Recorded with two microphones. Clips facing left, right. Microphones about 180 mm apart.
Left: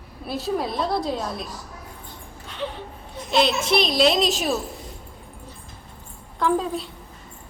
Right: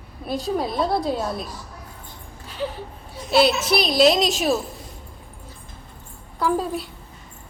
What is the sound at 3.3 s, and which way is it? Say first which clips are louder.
A child's voice: right 2 dB; 5° right (ahead or behind).